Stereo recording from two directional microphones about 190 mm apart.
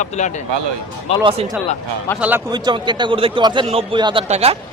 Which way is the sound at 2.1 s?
10° left (ahead or behind).